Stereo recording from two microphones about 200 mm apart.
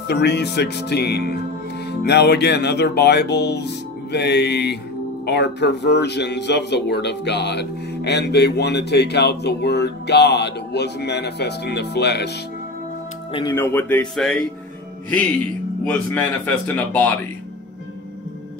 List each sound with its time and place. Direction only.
0.1 s speech: 55° left (ahead or behind)
13.3 s speech: 25° left (ahead or behind)
13.6 s a man's voice: 10° left (ahead or behind)
15.8 s a man's voice: 5° left (ahead or behind)